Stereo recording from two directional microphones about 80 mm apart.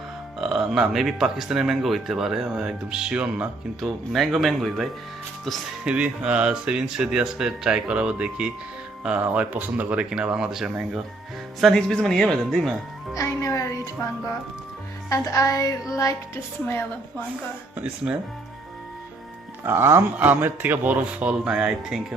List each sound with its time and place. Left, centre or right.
0.3 s speech: centre
3.8 s speech: centre
5.8 s speech: centre
13.1 s a woman's voice: left
17.7 s speech: centre
19.6 s speech: right; by 22.0 s centre